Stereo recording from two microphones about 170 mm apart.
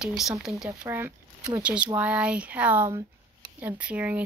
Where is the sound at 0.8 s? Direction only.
15° right (ahead or behind).